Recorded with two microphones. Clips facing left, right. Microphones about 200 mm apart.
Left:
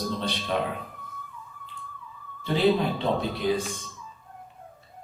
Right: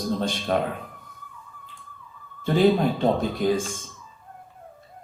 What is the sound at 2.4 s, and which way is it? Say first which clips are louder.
Speech: right 3 dB; 45° right (ahead or behind).